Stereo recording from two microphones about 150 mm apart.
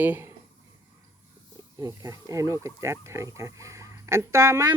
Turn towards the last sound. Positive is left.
turn(degrees=-20)  # may be behind; listen again after turning